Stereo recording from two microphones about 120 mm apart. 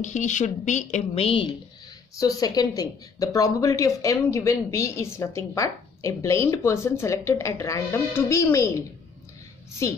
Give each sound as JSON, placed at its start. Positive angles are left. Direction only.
{"t": 0.0, "sound": "speech", "side_deg": 90}
{"t": 1.1, "sound": "a woman's voice", "side_deg": 50}
{"t": 2.1, "sound": "a woman's voice", "side_deg": 30}